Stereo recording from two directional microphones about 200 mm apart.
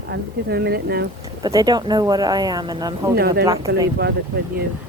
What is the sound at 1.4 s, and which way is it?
Speech, 20° right (ahead or behind).